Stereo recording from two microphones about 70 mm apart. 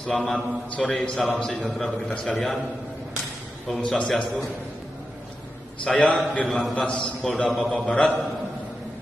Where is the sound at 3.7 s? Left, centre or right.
Centre.